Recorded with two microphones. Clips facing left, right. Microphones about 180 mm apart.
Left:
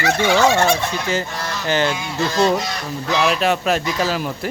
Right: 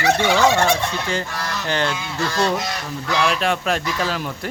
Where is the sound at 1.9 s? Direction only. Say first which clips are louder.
Left 3 dB; 20° left (ahead or behind).